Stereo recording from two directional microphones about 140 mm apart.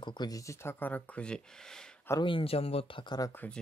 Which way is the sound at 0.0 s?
30° left (ahead or behind).